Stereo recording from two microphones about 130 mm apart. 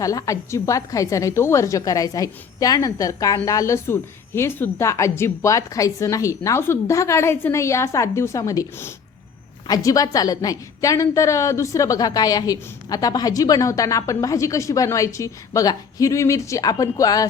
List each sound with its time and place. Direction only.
0.0 s a woman's voice: 25° left (ahead or behind)